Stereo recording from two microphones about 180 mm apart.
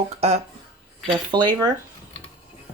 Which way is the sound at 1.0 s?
25° right (ahead or behind).